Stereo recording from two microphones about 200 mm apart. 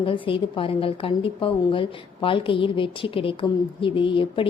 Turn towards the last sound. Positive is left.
turn(degrees=25)  # may be behind; listen again after turning